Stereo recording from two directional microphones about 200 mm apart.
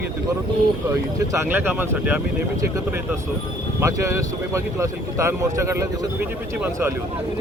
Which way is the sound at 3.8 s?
15° right (ahead or behind).